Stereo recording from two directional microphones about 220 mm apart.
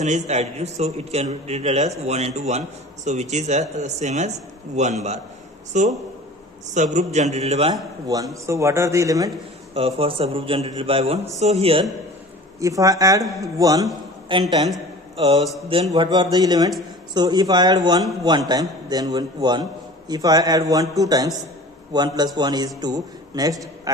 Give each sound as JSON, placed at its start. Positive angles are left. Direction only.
{"t": 0.0, "sound": "a man's voice", "side_deg": -30}
{"t": 8.1, "sound": "a man's voice", "side_deg": -15}
{"t": 9.8, "sound": "a man's voice", "side_deg": -25}
{"t": 12.5, "sound": "a man's voice", "side_deg": -15}
{"t": 15.7, "sound": "a man's voice", "side_deg": -25}